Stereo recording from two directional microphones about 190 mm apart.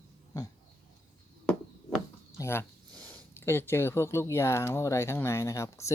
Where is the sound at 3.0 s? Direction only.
10° left (ahead or behind).